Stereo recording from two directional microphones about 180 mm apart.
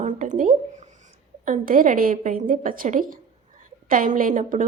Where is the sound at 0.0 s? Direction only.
45° right (ahead or behind).